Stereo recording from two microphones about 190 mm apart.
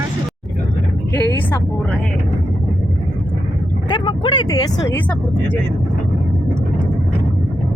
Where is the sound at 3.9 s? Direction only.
25° left (ahead or behind).